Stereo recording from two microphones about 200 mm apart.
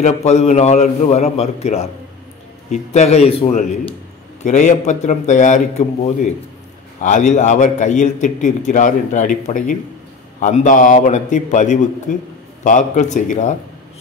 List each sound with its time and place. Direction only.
0.0 s a man's voice: 35° left (ahead or behind)